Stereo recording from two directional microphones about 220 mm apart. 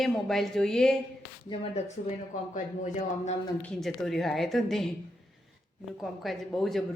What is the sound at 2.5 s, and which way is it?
Speech, 30° left (ahead or behind).